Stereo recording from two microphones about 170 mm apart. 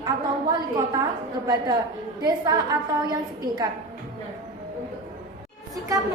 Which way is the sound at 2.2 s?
25° right (ahead or behind).